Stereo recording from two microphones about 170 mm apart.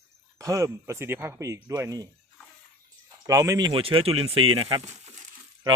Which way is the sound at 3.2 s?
20° right (ahead or behind).